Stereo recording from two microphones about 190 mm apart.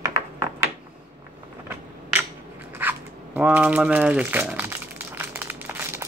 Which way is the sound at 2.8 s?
10° right (ahead or behind).